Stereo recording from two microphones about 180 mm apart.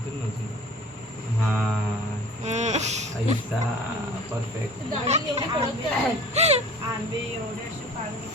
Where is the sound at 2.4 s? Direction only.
40° right (ahead or behind).